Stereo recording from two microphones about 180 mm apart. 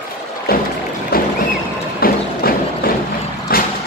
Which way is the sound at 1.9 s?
55° left (ahead or behind).